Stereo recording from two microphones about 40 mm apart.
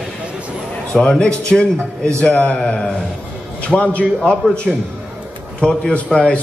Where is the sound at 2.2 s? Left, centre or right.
Left.